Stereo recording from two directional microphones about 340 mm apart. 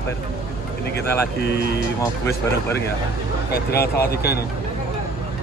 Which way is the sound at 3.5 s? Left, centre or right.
Left.